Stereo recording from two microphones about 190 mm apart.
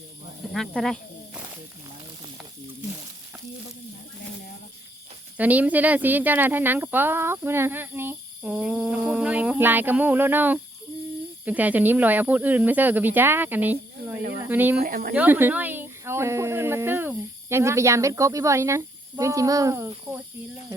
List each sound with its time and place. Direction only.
0.5 s speech: centre (ahead or behind)
5.4 s speech: 10° right (ahead or behind)
14.8 s speech: 50° right (ahead or behind)
15.1 s speech: 10° right (ahead or behind)